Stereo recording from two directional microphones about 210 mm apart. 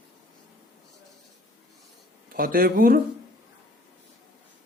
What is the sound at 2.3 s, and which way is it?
Speech, 40° right (ahead or behind).